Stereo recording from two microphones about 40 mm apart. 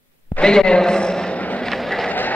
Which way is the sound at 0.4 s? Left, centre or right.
Centre.